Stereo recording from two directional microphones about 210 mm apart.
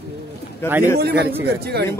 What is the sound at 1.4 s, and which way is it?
Speech, 50° right (ahead or behind).